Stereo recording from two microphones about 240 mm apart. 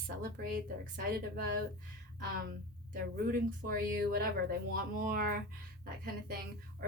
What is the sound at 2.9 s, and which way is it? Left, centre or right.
Speech, right.